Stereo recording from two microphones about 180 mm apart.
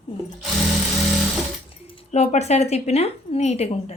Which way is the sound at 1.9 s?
35° left (ahead or behind).